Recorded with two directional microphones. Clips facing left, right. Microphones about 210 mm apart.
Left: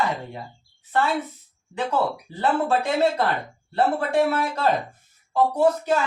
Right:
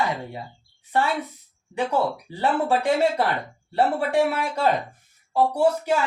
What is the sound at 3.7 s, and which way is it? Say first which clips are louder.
Speech: even; 15° right (ahead or behind).